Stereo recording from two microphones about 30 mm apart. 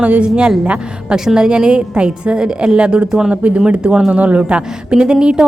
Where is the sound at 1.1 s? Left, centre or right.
Right.